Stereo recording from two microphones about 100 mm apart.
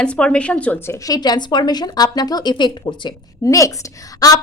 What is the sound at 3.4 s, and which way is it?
Speech, 35° left (ahead or behind).